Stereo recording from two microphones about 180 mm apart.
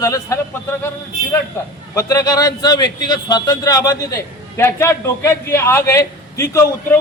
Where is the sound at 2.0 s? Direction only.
20° left (ahead or behind).